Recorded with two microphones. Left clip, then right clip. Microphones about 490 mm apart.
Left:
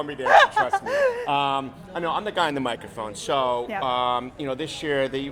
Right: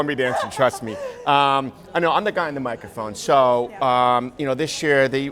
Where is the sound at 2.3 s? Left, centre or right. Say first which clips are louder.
Even; centre.